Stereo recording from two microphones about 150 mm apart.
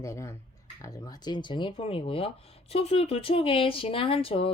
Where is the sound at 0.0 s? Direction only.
20° left (ahead or behind).